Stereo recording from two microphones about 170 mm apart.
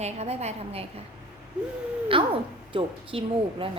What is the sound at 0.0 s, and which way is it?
Baby laughter, 40° right (ahead or behind).